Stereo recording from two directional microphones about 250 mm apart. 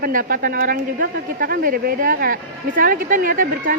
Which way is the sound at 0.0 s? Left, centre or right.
Right.